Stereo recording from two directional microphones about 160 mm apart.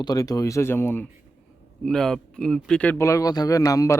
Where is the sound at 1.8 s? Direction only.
5° left (ahead or behind).